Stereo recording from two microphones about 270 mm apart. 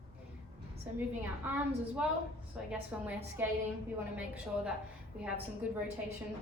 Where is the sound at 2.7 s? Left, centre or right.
Centre.